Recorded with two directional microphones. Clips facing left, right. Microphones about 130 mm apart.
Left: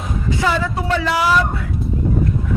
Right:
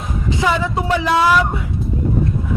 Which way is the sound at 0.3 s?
20° right (ahead or behind).